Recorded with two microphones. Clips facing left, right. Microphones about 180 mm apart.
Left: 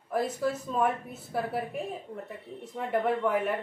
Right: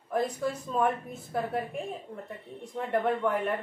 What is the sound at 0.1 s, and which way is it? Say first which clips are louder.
A woman's voice: left 1 dB; 5° left (ahead or behind).